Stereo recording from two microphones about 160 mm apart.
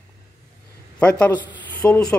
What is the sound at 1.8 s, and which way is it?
Speech, 20° left (ahead or behind).